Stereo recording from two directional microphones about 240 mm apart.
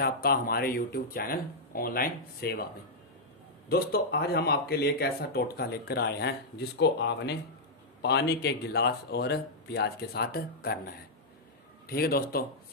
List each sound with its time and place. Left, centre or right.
0.0 s speech: left
3.6 s speech: left